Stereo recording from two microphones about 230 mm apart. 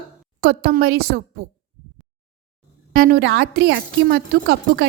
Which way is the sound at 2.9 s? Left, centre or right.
Right.